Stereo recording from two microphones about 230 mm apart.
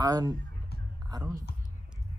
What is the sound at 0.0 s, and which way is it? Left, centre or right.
Speech, centre.